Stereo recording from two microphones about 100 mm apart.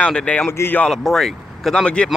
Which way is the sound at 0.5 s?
25° left (ahead or behind).